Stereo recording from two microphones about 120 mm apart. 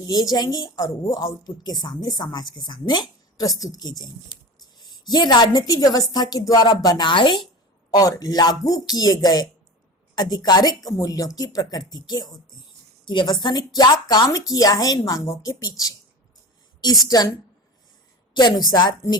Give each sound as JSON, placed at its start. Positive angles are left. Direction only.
{"t": 0.0, "sound": "a woman's voice", "side_deg": 30}
{"t": 17.1, "sound": "a woman's voice", "side_deg": 30}
{"t": 18.3, "sound": "a woman's voice", "side_deg": 40}